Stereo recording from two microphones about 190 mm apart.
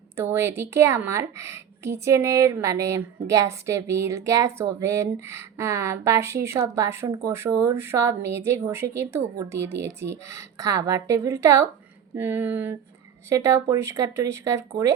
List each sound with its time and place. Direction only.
0.2 s a woman's voice: 15° right (ahead or behind)